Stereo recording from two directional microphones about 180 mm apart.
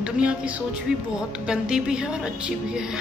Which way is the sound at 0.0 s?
5° right (ahead or behind).